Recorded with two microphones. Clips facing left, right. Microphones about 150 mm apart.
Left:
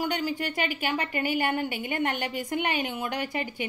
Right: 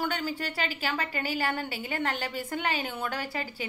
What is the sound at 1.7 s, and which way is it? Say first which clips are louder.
Speech: left 3 dB; 35° right (ahead or behind).